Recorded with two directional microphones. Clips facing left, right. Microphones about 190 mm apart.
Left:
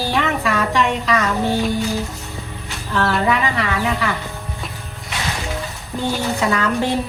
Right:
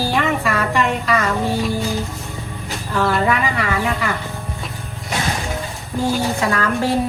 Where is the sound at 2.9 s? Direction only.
Centre (ahead or behind).